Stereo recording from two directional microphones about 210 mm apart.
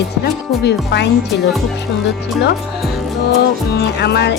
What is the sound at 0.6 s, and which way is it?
Speech, 55° left (ahead or behind).